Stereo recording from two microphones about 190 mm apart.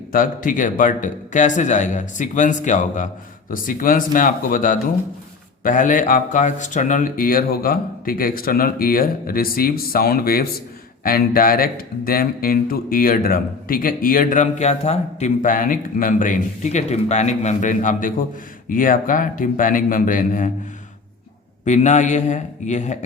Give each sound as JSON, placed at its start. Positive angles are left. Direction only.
{"t": 0.1, "sound": "a man's voice", "side_deg": 45}
{"t": 21.6, "sound": "a man's voice", "side_deg": 40}